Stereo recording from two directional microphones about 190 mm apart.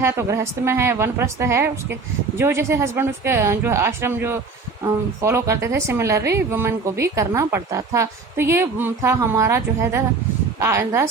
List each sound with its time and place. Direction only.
0.0 s a woman's voice: 15° right (ahead or behind)